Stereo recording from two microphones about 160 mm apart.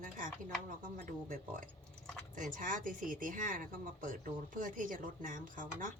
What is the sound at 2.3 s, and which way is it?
Speech, 55° right (ahead or behind).